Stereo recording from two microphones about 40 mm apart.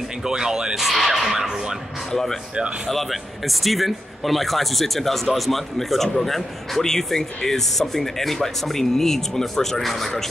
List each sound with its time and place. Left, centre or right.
0.2 s speech: centre
0.7 s speech: centre
2.9 s a man's voice: centre